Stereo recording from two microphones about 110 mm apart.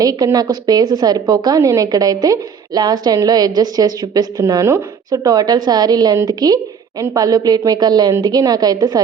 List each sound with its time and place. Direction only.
0.0 s a woman's voice: 35° right (ahead or behind)